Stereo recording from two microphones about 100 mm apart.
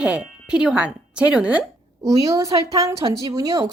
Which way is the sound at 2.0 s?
35° right (ahead or behind).